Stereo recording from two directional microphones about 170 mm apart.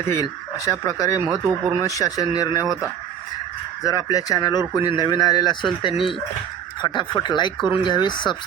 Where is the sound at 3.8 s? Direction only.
20° left (ahead or behind).